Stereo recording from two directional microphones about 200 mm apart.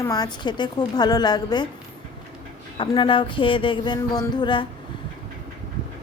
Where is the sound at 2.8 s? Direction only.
25° left (ahead or behind).